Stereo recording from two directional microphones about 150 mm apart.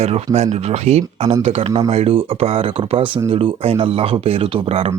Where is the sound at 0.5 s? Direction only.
45° right (ahead or behind).